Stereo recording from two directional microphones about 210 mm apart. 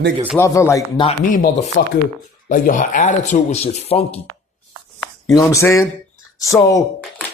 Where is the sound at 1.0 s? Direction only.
35° left (ahead or behind).